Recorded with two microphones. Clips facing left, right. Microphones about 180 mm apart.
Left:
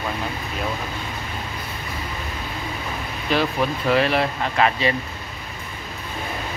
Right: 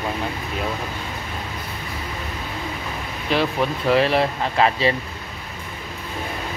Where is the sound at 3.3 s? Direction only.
Centre (ahead or behind).